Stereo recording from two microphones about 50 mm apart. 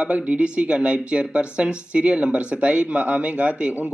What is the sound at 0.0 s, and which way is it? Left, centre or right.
Speech, right.